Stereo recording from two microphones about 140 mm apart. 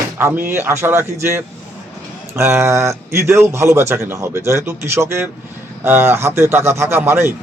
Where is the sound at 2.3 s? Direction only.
20° right (ahead or behind).